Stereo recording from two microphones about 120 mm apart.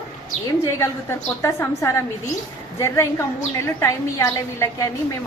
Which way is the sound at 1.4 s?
20° left (ahead or behind).